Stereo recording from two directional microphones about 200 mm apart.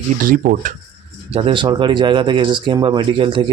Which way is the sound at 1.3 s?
30° right (ahead or behind).